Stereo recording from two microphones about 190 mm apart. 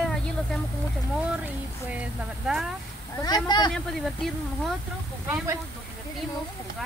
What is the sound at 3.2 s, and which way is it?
Speech, 20° left (ahead or behind).